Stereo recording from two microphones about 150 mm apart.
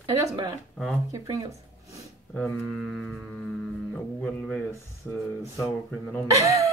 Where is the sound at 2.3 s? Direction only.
10° left (ahead or behind).